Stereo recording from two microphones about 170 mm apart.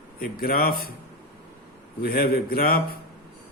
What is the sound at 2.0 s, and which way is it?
Speech, 60° left (ahead or behind).